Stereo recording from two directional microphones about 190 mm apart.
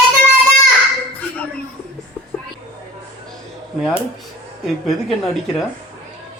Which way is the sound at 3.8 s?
5° right (ahead or behind).